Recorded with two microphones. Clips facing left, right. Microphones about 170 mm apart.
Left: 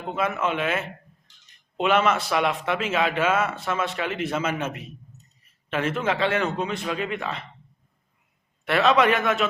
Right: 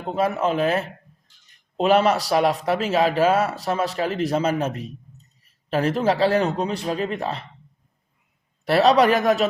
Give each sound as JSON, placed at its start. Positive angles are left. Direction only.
{"t": 0.1, "sound": "speech", "side_deg": -35}
{"t": 8.6, "sound": "speech", "side_deg": -35}